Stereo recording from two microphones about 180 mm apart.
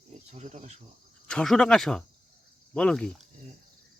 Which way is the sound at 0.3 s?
40° right (ahead or behind).